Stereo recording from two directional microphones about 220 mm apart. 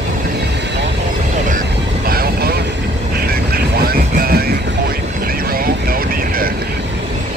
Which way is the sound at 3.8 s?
45° right (ahead or behind).